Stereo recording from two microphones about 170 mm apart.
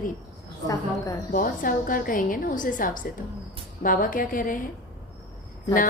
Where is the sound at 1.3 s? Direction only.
55° left (ahead or behind).